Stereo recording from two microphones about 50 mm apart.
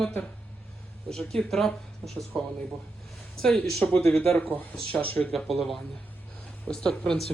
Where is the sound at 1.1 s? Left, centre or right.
Centre.